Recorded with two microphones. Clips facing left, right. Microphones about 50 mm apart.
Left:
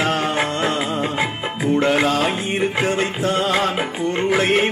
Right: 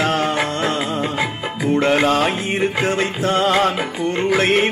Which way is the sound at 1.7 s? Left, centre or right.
Right.